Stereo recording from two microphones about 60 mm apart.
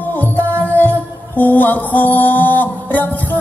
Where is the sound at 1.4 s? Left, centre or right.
Left.